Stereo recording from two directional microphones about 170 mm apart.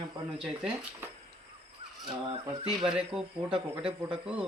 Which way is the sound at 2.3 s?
30° right (ahead or behind).